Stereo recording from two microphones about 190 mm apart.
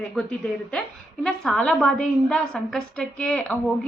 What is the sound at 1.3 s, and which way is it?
A woman's voice, 5° left (ahead or behind).